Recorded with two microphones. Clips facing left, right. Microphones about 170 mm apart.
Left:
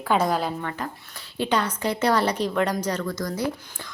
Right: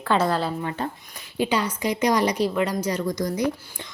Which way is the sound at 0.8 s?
30° right (ahead or behind).